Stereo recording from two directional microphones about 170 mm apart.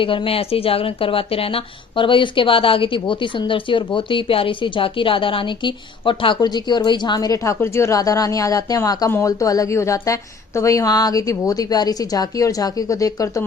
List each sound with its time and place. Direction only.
0.0 s speech: 30° left (ahead or behind)